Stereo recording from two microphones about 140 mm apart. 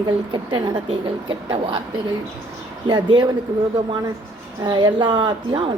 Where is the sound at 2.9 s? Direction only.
35° right (ahead or behind).